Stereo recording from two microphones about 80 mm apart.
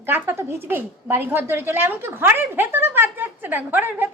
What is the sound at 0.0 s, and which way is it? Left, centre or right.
A woman's voice, right.